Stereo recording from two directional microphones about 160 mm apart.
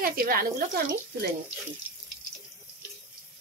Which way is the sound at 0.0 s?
65° right (ahead or behind).